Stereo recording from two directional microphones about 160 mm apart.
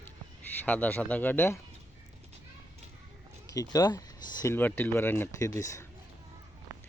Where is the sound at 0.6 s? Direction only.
10° left (ahead or behind).